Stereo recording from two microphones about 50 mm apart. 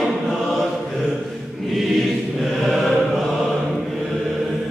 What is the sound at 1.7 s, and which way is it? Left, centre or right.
Choir, centre.